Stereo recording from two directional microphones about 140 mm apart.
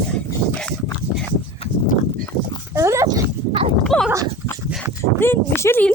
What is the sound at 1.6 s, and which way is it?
Horse, 45° left (ahead or behind).